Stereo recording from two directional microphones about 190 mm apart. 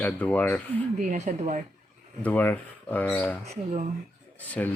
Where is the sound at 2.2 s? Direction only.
10° left (ahead or behind).